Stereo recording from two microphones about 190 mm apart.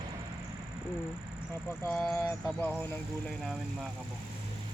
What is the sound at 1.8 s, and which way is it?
Speech, 5° left (ahead or behind).